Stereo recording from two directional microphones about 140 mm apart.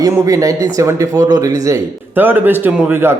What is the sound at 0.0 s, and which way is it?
Speech, 20° right (ahead or behind).